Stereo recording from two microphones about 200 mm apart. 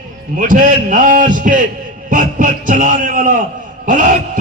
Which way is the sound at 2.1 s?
40° right (ahead or behind).